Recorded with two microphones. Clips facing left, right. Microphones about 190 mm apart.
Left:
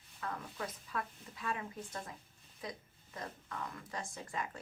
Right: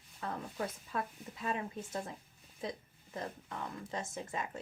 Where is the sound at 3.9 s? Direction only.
25° right (ahead or behind).